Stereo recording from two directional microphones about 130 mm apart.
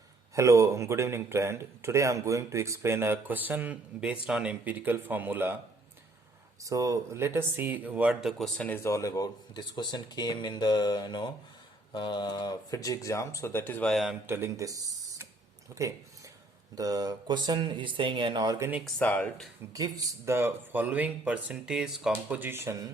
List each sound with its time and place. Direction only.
0.3 s speech: 25° right (ahead or behind)
6.6 s speech: 25° right (ahead or behind); by 8.8 s 10° left (ahead or behind)
8.8 s speech: 25° left (ahead or behind)
13.9 s speech: centre (ahead or behind)
14.3 s speech: 20° right (ahead or behind); by 18.5 s 35° right (ahead or behind)
18.9 s speech: 10° left (ahead or behind)
19.7 s speech: 25° right (ahead or behind)